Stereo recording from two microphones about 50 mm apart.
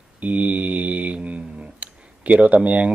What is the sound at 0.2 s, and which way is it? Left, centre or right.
Mantra, right.